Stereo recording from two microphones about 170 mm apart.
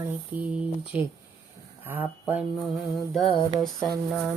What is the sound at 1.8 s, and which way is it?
Speech, 10° right (ahead or behind).